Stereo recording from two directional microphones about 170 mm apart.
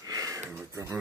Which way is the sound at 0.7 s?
20° right (ahead or behind).